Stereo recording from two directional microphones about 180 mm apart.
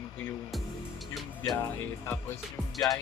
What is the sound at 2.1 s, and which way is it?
Speech, 15° left (ahead or behind).